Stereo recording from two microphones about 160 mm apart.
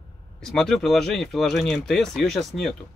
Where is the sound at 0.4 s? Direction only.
Centre (ahead or behind).